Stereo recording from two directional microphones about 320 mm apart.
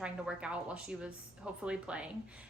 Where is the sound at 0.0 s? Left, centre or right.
Centre.